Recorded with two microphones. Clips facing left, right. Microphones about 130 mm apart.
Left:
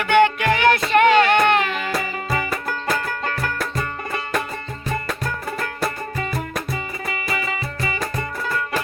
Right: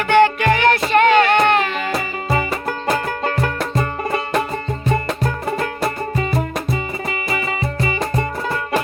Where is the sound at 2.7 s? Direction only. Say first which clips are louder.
Right 5 dB; 20° right (ahead or behind).